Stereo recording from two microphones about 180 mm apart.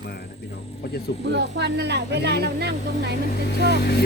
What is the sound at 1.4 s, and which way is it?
Speech, 70° right (ahead or behind).